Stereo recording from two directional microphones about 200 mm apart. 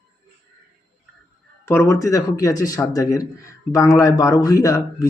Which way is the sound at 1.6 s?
15° left (ahead or behind).